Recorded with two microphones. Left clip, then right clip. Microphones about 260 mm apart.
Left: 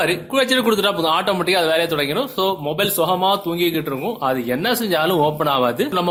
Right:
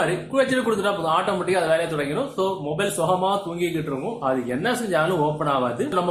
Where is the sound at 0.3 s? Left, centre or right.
Left.